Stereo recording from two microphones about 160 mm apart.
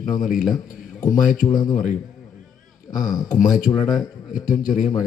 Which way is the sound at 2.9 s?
Centre (ahead or behind).